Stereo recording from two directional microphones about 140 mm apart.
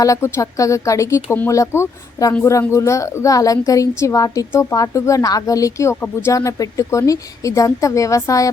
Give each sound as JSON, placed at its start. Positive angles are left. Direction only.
{"t": 0.0, "sound": "a woman's voice", "side_deg": 20}